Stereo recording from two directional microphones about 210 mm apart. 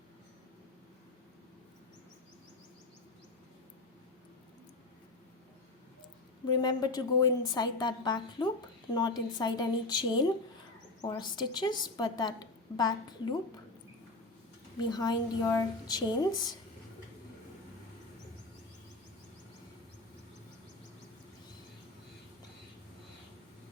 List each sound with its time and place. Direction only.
6.5 s a woman's voice: 20° left (ahead or behind)
14.8 s a woman's voice: 20° left (ahead or behind)